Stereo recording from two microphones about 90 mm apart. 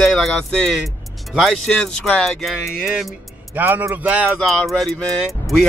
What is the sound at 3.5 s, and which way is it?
Speech, 20° right (ahead or behind).